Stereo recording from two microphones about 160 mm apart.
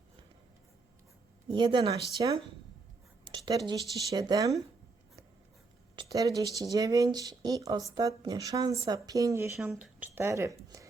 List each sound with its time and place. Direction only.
1.5 s speech: 30° right (ahead or behind)
6.0 s speech: 20° right (ahead or behind); by 10.2 s 5° right (ahead or behind)
10.2 s speech: 15° right (ahead or behind)